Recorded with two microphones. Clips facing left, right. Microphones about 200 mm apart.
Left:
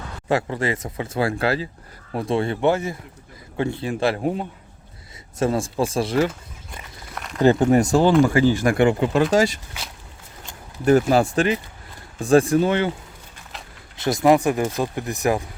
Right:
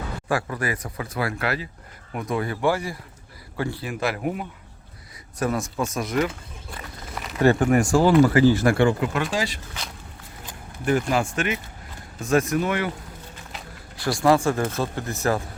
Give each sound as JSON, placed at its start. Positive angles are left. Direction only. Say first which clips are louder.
{"t": 0.3, "sound": "speech", "louder": "left 4 dB", "side_deg": 25}
{"t": 7.2, "sound": "a sound", "louder": "left 1 dB", "side_deg": 0}
{"t": 7.4, "sound": "speech", "louder": "left 3 dB", "side_deg": 20}
{"t": 9.3, "sound": "speech", "louder": "left 8 dB", "side_deg": 45}
{"t": 11.1, "sound": "speech", "louder": "left 6 dB", "side_deg": 35}
{"t": 13.9, "sound": "speech", "louder": "left 3 dB", "side_deg": 20}